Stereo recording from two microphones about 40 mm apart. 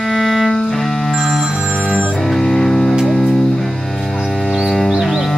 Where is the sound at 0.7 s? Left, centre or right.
Centre.